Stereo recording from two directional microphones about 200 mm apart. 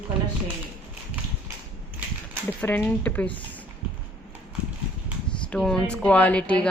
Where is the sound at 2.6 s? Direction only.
10° left (ahead or behind).